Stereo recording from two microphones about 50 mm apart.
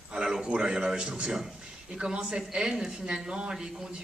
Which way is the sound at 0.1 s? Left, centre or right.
Centre.